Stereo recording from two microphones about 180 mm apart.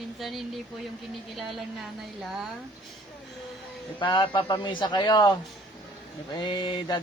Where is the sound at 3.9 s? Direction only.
25° left (ahead or behind).